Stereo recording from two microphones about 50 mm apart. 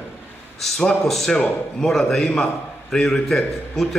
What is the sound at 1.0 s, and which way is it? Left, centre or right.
A man's voice, centre.